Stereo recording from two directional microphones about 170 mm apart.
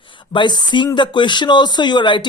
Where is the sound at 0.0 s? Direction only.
30° left (ahead or behind).